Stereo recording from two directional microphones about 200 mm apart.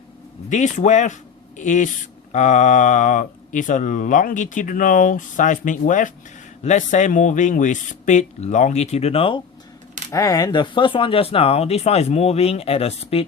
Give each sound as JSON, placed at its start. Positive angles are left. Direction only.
{"t": 0.5, "sound": "speech", "side_deg": 35}
{"t": 10.1, "sound": "speech", "side_deg": 15}